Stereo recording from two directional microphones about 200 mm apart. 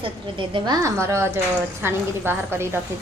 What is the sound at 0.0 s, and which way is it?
A woman's voice, 25° right (ahead or behind).